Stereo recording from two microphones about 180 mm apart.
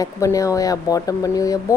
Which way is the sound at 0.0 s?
15° left (ahead or behind).